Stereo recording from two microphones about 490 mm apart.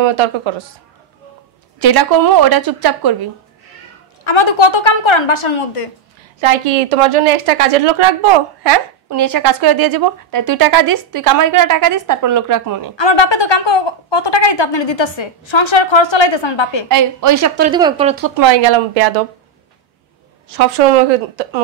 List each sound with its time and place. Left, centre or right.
0.0 s speech: right
1.8 s a woman's voice: right
4.2 s a woman's voice: left
6.4 s a woman's voice: right
9.1 s speech: right
12.9 s a woman's voice: left
16.9 s speech: right
17.6 s speech: centre
18.4 s a woman's voice: right